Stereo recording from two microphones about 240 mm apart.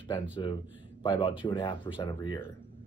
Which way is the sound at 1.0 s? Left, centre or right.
Centre.